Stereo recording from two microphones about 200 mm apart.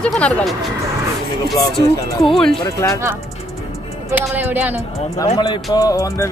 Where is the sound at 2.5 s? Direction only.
20° left (ahead or behind).